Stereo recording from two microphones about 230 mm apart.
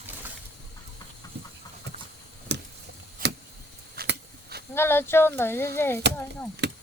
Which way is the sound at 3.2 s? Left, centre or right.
Right.